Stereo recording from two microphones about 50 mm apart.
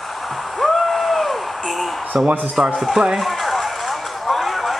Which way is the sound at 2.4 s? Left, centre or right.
Centre.